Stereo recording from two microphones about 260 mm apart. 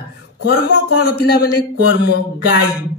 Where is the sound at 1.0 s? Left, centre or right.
Left.